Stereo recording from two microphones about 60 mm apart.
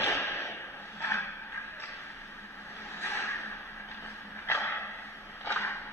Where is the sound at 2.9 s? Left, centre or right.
Left.